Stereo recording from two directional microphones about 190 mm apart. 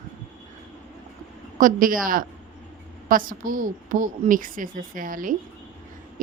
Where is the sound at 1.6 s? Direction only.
45° right (ahead or behind).